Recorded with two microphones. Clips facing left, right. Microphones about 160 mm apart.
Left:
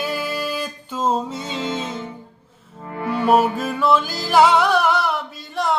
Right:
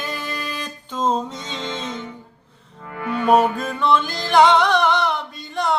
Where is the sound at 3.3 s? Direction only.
5° left (ahead or behind).